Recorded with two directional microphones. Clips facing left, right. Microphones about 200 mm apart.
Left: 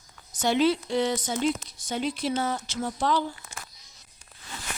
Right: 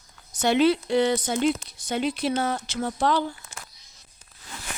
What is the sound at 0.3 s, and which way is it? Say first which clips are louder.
Speech: right 3 dB; 65° right (ahead or behind).